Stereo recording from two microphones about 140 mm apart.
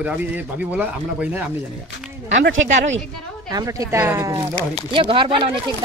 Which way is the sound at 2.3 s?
55° right (ahead or behind).